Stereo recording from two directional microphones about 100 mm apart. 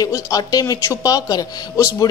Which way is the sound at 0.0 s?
40° left (ahead or behind).